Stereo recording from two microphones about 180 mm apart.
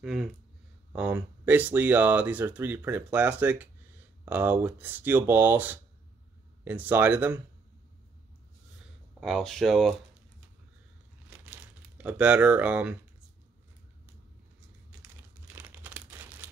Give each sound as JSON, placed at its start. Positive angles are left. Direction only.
{"t": 0.0, "sound": "speech", "side_deg": 0}
{"t": 9.2, "sound": "speech", "side_deg": 0}
{"t": 11.2, "sound": "crumpling", "side_deg": -10}
{"t": 15.5, "sound": "crumpling", "side_deg": -10}